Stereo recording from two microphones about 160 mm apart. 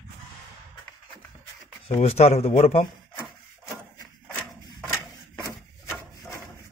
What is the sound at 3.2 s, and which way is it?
Wood, 15° left (ahead or behind).